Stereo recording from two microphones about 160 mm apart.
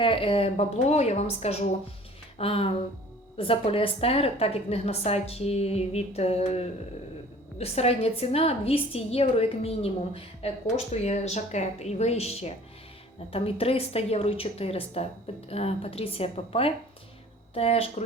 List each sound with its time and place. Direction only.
0.0 s a woman's voice: 35° left (ahead or behind)